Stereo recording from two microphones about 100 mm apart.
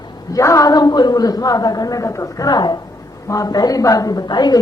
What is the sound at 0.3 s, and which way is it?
A woman's voice, 35° left (ahead or behind).